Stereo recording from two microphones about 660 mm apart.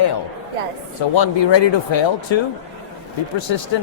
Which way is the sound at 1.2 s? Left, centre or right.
Left.